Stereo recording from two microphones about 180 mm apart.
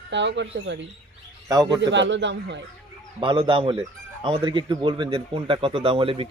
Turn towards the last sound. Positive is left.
turn(degrees=-30)  # may be behind; listen again after turning